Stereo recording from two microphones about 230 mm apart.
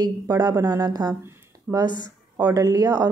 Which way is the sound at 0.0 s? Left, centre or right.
Centre.